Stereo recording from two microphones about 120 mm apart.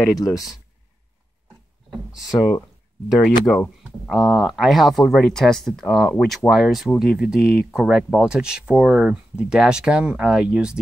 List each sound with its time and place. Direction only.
0.2 s speech: 30° left (ahead or behind)
3.1 s speech: centre (ahead or behind)